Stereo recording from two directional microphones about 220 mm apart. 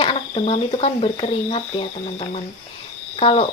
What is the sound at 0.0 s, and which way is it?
Speech, 25° left (ahead or behind).